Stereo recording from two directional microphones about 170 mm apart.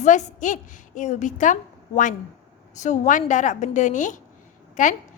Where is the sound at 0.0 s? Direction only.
45° left (ahead or behind).